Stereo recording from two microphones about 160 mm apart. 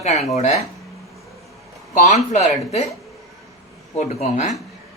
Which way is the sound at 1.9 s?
45° left (ahead or behind).